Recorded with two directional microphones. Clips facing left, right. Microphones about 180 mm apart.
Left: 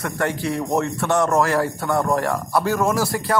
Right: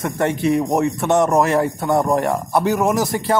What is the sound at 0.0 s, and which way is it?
Speech, 20° right (ahead or behind).